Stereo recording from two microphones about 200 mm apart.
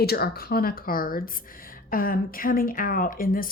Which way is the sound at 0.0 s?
50° left (ahead or behind).